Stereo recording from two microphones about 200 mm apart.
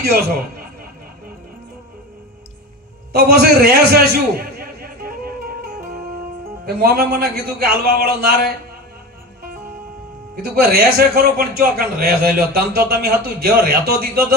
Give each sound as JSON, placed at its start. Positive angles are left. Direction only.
{"t": 0.0, "sound": "a man's voice", "side_deg": -50}
{"t": 3.1, "sound": "a man's voice", "side_deg": -50}
{"t": 6.7, "sound": "a man's voice", "side_deg": -50}
{"t": 10.3, "sound": "a man's voice", "side_deg": -50}